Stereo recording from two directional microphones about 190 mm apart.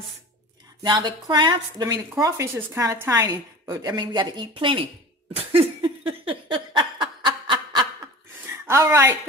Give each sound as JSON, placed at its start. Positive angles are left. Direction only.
{"t": 0.8, "sound": "speech", "side_deg": -20}
{"t": 5.4, "sound": "laughter", "side_deg": -30}
{"t": 8.5, "sound": "a woman's voice", "side_deg": -10}